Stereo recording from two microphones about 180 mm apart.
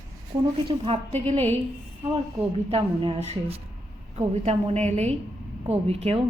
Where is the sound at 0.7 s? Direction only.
35° right (ahead or behind).